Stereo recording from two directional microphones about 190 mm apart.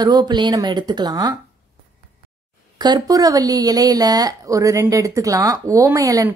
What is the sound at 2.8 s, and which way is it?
A woman's voice, 20° right (ahead or behind).